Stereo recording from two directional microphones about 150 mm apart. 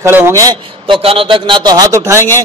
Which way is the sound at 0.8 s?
35° right (ahead or behind).